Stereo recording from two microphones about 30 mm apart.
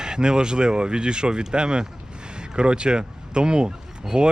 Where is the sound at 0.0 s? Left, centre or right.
Right.